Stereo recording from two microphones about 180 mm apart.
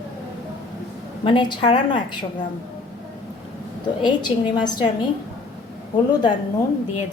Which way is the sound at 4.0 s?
25° left (ahead or behind).